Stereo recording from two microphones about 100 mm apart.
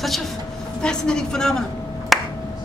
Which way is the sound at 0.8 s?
5° left (ahead or behind).